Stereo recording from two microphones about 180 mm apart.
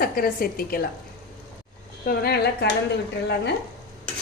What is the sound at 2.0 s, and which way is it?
Speech, 55° left (ahead or behind).